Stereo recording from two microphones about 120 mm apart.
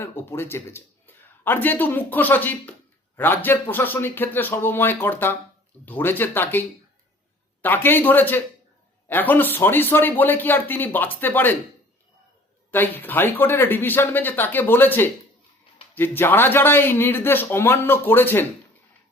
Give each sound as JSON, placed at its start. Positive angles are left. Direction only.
{"t": 0.0, "sound": "a man's voice", "side_deg": 20}
{"t": 12.7, "sound": "a man's voice", "side_deg": 15}